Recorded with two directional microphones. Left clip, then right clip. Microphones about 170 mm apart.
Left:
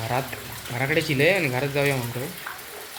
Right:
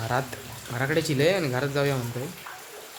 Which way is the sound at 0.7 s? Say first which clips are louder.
Left 2 dB; 10° right (ahead or behind).